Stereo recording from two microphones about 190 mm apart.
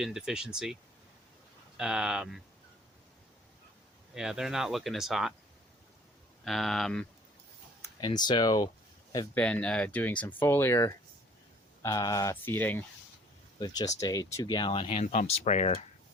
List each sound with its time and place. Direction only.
0.0 s speech: 5° right (ahead or behind)
1.8 s speech: 5° right (ahead or behind)
4.1 s speech: centre (ahead or behind)
6.4 s speech: centre (ahead or behind)
7.8 s speech: 20° left (ahead or behind)
9.3 s speech: 5° left (ahead or behind); by 15.8 s 35° left (ahead or behind)